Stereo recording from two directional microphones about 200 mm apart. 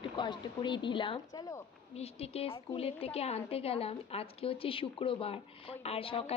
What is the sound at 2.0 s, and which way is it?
A woman's voice, 30° left (ahead or behind).